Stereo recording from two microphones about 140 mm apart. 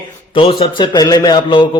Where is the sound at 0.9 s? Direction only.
30° left (ahead or behind).